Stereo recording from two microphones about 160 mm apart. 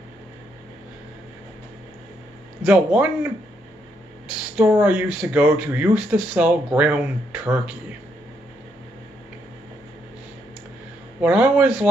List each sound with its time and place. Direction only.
2.6 s speech: 10° right (ahead or behind)
4.3 s speech: 10° right (ahead or behind)
11.1 s speech: 10° right (ahead or behind)